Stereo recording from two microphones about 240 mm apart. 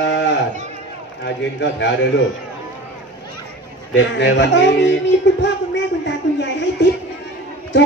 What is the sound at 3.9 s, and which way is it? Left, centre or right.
Speech, left.